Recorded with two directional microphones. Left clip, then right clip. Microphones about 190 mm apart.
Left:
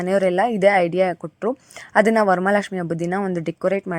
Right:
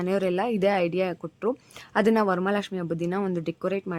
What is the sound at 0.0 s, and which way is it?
Speech, 20° left (ahead or behind).